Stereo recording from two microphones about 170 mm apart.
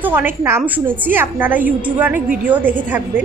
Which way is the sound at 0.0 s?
10° right (ahead or behind).